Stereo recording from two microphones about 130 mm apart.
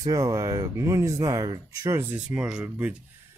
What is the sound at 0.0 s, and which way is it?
Speech, 25° right (ahead or behind).